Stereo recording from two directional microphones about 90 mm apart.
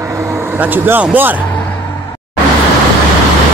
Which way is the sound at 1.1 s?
20° right (ahead or behind).